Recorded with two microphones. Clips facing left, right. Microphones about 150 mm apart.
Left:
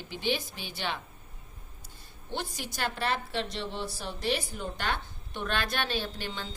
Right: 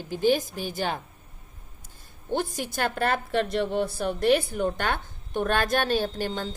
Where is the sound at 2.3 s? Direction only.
50° right (ahead or behind).